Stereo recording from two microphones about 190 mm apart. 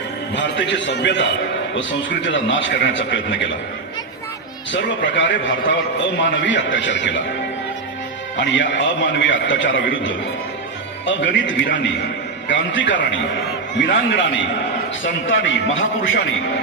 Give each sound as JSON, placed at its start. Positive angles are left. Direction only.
{"t": 0.3, "sound": "a man's voice", "side_deg": 70}
{"t": 1.8, "sound": "a man's voice", "side_deg": 80}
{"t": 4.7, "sound": "a man's voice", "side_deg": 70}
{"t": 8.4, "sound": "a man's voice", "side_deg": 70}
{"t": 15.2, "sound": "a man's voice", "side_deg": 90}